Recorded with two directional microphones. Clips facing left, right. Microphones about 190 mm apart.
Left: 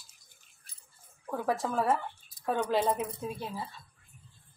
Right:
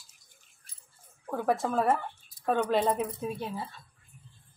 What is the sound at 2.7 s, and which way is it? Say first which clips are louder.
Speech: right 2 dB; 20° right (ahead or behind).